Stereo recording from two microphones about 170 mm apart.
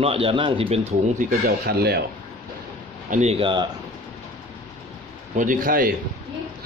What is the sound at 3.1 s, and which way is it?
Speech, 40° right (ahead or behind).